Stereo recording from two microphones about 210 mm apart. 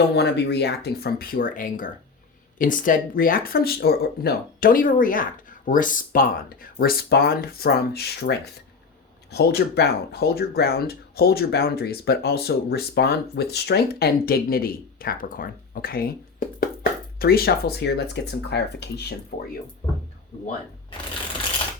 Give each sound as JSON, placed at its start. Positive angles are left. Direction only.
{"t": 0.2, "sound": "speech", "side_deg": 55}